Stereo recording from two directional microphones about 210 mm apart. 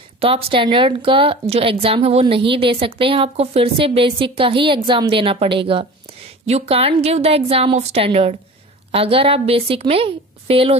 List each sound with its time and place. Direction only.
0.2 s a woman's voice: 25° right (ahead or behind)